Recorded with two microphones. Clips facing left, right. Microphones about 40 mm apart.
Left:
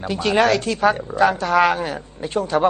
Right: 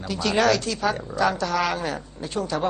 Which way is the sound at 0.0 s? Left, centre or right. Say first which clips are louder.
Left 4 dB; left.